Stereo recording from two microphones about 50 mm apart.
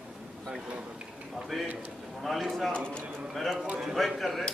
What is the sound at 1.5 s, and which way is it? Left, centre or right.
Speech, centre.